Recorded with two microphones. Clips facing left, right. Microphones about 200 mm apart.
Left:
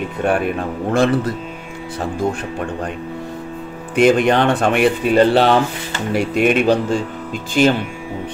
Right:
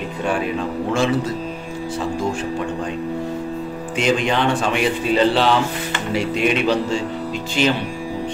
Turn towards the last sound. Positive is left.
turn(degrees=50)  # may be behind; listen again after turning